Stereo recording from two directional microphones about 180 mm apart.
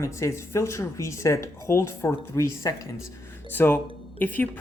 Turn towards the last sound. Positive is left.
turn(degrees=10)  # may be behind; listen again after turning